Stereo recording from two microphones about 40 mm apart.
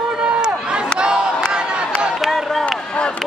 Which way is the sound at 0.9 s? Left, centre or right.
Right.